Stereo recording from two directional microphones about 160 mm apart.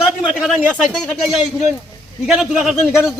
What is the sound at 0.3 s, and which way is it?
Speech, 5° right (ahead or behind).